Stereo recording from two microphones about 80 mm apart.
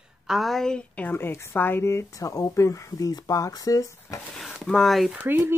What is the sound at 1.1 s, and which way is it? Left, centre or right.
Speech, left.